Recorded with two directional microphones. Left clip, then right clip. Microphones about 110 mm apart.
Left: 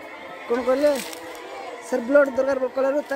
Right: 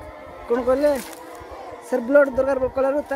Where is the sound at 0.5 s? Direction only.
45° right (ahead or behind).